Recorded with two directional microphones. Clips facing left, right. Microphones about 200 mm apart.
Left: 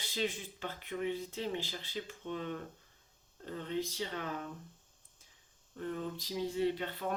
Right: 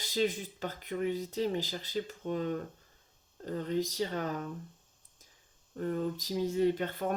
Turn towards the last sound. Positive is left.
turn(degrees=-45)  # may be behind; listen again after turning